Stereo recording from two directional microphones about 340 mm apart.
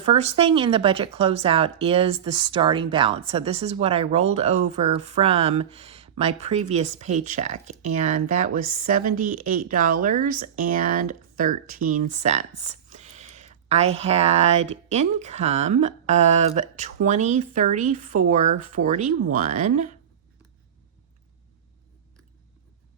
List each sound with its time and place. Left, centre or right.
0.0 s speech: centre